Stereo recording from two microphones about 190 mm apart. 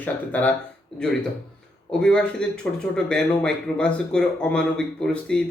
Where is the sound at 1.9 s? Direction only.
5° left (ahead or behind).